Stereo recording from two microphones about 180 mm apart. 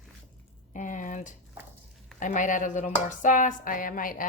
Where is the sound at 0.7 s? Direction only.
45° left (ahead or behind).